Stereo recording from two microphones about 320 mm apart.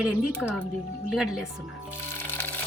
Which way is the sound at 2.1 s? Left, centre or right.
Centre.